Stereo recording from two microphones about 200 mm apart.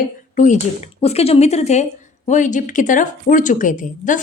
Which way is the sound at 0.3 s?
40° left (ahead or behind).